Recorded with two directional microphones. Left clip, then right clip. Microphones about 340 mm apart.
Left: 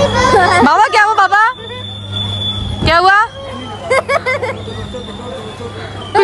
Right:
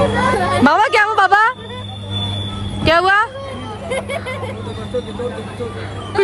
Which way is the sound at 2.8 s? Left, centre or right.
Centre.